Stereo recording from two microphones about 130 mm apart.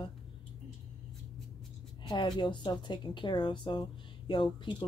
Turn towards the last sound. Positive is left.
turn(degrees=40)  # may be behind; listen again after turning